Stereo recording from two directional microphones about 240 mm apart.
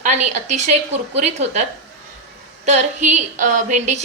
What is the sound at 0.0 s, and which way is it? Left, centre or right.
A woman's voice, right.